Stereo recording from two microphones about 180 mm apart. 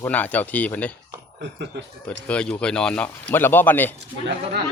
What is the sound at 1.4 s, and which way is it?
Speech, 75° right (ahead or behind).